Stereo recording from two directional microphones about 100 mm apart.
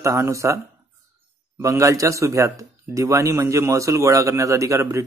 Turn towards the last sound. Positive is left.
turn(degrees=-30)  # may be behind; listen again after turning